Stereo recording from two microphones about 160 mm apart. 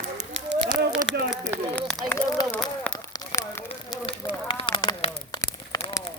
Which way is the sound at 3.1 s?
20° left (ahead or behind).